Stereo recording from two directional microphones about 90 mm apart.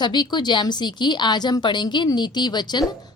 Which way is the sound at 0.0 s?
55° left (ahead or behind).